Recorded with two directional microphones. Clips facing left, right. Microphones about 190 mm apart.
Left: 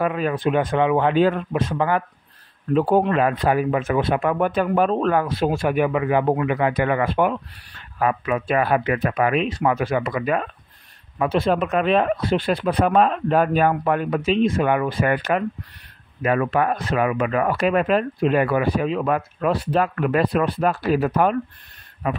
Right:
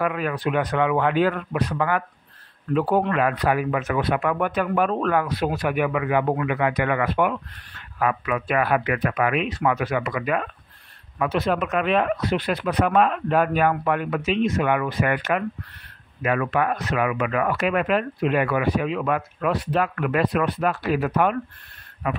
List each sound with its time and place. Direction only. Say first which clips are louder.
0.0 s speech: left 3 dB; 25° left (ahead or behind)